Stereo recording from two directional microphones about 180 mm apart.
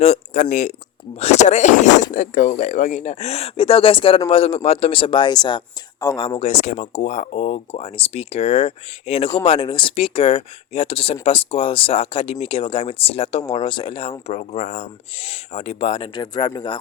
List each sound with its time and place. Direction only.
0.0 s a man's voice: 40° left (ahead or behind)
16.1 s speech: 25° left (ahead or behind)